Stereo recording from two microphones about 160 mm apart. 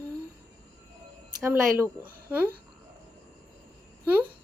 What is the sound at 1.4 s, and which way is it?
Speech, 15° right (ahead or behind).